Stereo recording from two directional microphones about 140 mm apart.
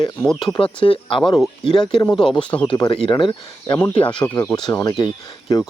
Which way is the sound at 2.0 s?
5° left (ahead or behind).